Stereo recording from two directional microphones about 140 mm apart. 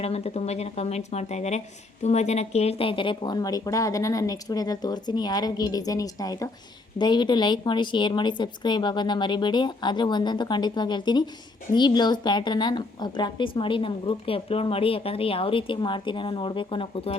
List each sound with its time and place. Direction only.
0.0 s a woman's voice: 50° left (ahead or behind)